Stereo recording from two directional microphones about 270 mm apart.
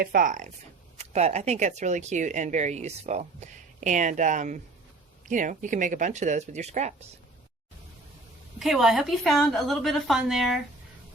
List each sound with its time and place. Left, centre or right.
0.0 s speech: right
8.5 s a woman's voice: centre